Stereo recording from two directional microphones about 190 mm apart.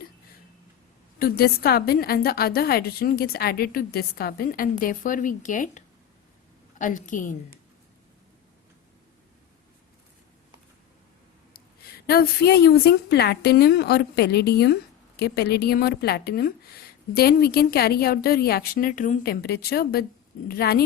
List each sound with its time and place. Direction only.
1.2 s a woman's voice: 55° left (ahead or behind)
11.5 s a woman's voice: 55° left (ahead or behind)